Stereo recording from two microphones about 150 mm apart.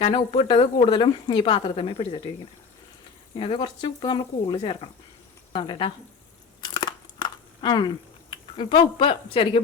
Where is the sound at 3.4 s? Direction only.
35° left (ahead or behind).